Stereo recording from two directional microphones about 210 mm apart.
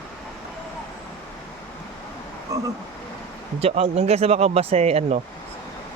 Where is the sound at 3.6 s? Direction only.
30° right (ahead or behind).